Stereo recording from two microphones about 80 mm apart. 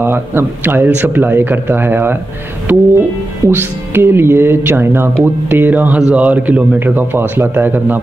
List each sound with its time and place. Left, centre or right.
0.0 s speech: right